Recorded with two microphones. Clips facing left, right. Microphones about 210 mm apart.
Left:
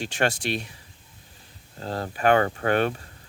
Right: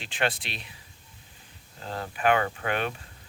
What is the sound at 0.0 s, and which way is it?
Speech, 45° left (ahead or behind).